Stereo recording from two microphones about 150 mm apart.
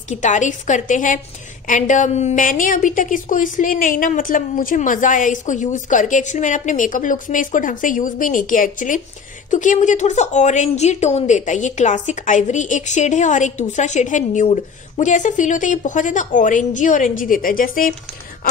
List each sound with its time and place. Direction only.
0.1 s a woman's voice: 55° left (ahead or behind)